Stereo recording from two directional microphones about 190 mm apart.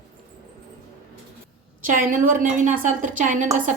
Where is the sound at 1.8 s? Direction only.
45° right (ahead or behind).